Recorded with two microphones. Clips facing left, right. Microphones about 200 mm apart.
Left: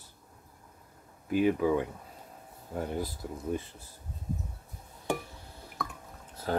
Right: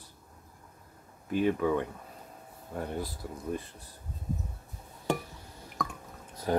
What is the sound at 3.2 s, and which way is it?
Speech, 20° left (ahead or behind).